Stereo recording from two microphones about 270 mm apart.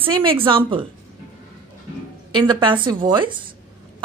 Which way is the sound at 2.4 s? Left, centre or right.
Centre.